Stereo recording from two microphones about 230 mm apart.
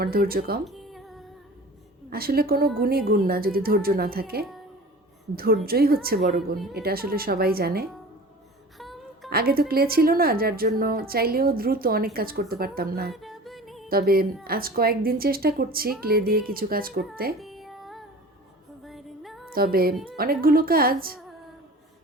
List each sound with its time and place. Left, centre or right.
0.0 s a woman's voice: right
0.6 s music: centre
2.0 s a woman's voice: right
8.8 s music: centre
9.3 s a woman's voice: right
13.1 s music: centre
13.9 s a woman's voice: right
17.4 s music: centre
19.5 s a woman's voice: right